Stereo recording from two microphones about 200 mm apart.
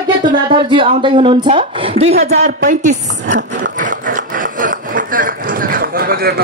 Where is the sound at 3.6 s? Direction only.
40° right (ahead or behind).